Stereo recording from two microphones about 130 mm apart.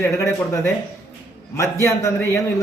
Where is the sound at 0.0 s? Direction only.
20° left (ahead or behind).